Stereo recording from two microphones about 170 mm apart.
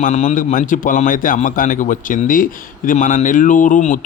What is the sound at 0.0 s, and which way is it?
A man's voice, 45° left (ahead or behind).